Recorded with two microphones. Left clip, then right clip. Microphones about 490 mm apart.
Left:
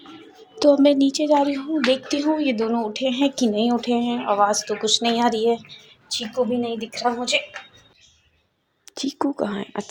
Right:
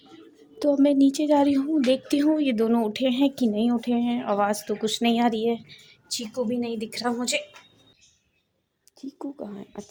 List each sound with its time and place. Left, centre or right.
0.6 s a woman's voice: right
9.0 s speech: right